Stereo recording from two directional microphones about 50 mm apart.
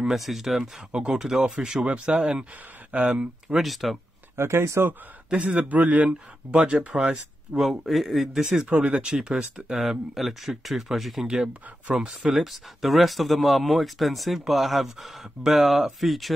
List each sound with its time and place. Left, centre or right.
0.0 s speech: centre
0.6 s speech: centre
3.4 s speech: centre
4.4 s speech: right
5.3 s speech: right
6.0 s speech: centre
8.6 s speech: right; by 16.3 s centre